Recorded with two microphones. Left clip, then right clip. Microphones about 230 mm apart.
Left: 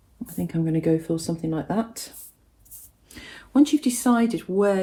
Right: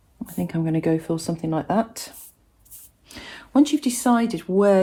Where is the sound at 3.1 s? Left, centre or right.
Right.